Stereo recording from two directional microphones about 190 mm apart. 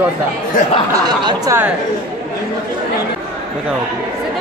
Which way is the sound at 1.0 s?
20° right (ahead or behind).